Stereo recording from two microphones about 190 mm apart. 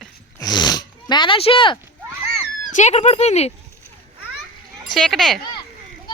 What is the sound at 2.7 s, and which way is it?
Speech, 40° left (ahead or behind).